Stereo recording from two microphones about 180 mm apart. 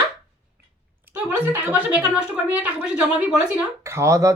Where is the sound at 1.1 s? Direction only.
10° right (ahead or behind).